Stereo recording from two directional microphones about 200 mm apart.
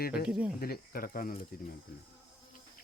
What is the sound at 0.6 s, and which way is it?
Speech, 50° left (ahead or behind).